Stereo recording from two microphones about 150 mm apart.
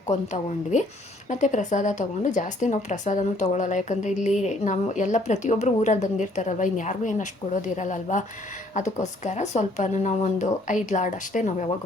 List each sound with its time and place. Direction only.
1.3 s speech: 55° left (ahead or behind)